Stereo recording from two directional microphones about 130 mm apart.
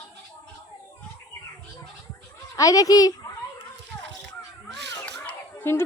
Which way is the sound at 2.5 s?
25° left (ahead or behind).